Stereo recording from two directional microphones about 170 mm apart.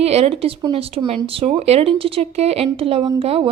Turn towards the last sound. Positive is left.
turn(degrees=-35)  # may be behind; listen again after turning